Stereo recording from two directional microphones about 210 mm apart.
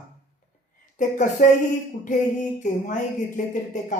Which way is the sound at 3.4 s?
35° left (ahead or behind).